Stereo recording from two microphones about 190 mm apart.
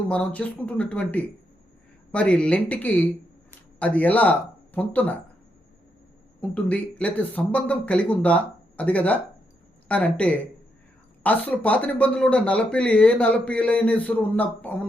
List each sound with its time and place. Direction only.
0.1 s speech: 5° left (ahead or behind)
6.4 s speech: 5° left (ahead or behind)